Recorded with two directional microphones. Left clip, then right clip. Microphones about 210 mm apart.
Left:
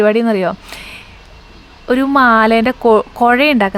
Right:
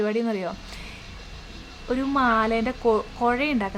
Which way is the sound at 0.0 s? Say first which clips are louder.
Left 13 dB; 40° left (ahead or behind).